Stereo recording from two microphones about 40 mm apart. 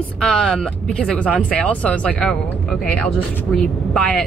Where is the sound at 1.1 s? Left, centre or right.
Left.